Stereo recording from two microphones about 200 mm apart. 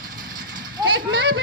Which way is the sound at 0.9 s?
55° right (ahead or behind).